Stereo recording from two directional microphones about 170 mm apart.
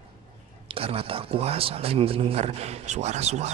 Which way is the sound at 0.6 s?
35° right (ahead or behind).